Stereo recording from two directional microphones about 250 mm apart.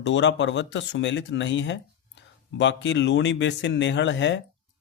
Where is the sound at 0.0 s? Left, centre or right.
Left.